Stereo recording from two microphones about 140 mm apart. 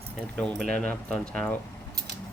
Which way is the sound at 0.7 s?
5° left (ahead or behind).